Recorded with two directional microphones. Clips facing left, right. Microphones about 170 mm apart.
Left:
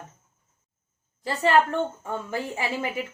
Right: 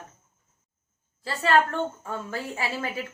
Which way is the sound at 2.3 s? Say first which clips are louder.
Left 2 dB; 15° left (ahead or behind).